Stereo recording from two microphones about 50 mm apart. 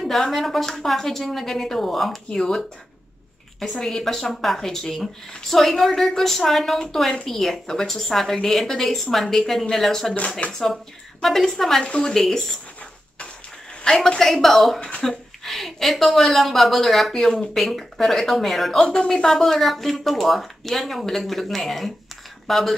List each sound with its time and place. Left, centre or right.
0.0 s a woman's voice: centre
11.2 s a woman's voice: centre
13.8 s a woman's voice: centre
14.8 s speech: left
15.0 s a woman's voice: centre
18.8 s a woman's voice: centre